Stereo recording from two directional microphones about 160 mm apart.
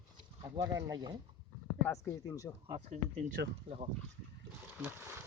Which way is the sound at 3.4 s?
90° right.